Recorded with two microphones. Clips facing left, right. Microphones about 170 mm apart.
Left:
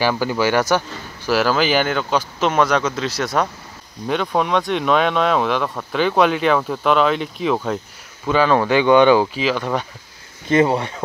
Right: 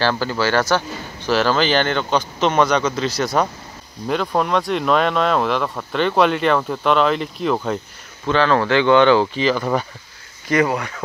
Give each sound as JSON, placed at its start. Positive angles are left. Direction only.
{"t": 0.0, "sound": "speech", "side_deg": 10}
{"t": 8.3, "sound": "speech", "side_deg": 10}
{"t": 10.5, "sound": "speech", "side_deg": 25}